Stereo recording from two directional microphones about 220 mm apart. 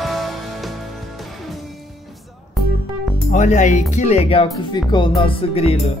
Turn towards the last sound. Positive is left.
turn(degrees=25)  # may be behind; listen again after turning